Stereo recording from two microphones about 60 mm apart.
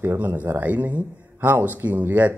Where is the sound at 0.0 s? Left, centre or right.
Right.